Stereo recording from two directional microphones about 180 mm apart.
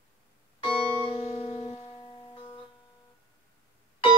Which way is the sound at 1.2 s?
30° left (ahead or behind).